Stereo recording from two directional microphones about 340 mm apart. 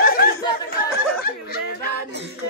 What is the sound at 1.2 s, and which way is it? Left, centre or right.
Snicker, left.